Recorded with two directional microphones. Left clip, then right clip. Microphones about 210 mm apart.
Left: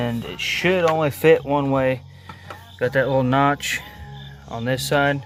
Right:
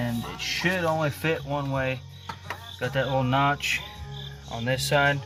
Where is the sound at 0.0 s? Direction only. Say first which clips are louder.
Left 6 dB; 55° left (ahead or behind); by 5.1 s 35° left (ahead or behind).